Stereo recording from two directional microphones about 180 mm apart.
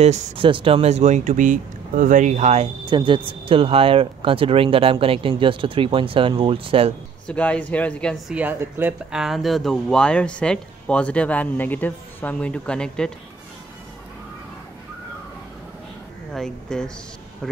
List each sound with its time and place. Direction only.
0.0 s speech: 30° right (ahead or behind)
2.9 s speech: 25° right (ahead or behind)
7.2 s speech: 5° left (ahead or behind)
8.4 s speech: 10° right (ahead or behind); by 13.1 s 5° left (ahead or behind)
16.3 s speech: 5° left (ahead or behind)